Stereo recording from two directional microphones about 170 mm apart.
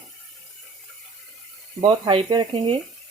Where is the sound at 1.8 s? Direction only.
35° right (ahead or behind).